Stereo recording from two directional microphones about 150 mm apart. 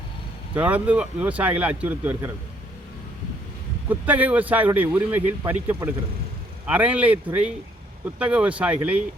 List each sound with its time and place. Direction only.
0.5 s speech: 10° right (ahead or behind)
3.8 s speech: 10° right (ahead or behind)
8.2 s speech: 10° right (ahead or behind)